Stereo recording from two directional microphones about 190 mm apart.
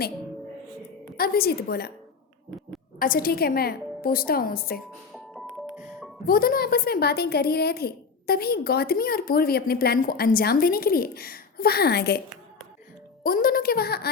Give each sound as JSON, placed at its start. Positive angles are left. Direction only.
{"t": 1.1, "sound": "a woman's voice", "side_deg": 50}
{"t": 3.0, "sound": "a woman's voice", "side_deg": 50}
{"t": 5.1, "sound": "music", "side_deg": 0}
{"t": 6.2, "sound": "a woman's voice", "side_deg": 50}
{"t": 13.2, "sound": "a woman's voice", "side_deg": 50}